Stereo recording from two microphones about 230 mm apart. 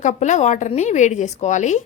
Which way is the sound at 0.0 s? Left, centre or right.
Left.